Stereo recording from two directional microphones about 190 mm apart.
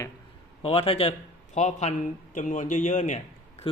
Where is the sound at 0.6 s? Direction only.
30° left (ahead or behind).